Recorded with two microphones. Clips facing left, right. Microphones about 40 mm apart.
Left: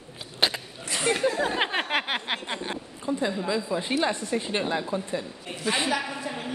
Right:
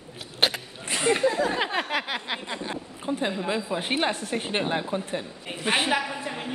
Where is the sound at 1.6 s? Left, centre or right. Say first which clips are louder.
Left 1 dB; left.